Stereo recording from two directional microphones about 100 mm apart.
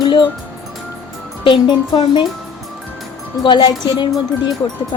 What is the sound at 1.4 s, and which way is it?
Speech, 55° left (ahead or behind).